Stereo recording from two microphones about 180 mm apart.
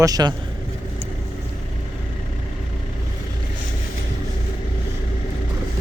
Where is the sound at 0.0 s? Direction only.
20° right (ahead or behind).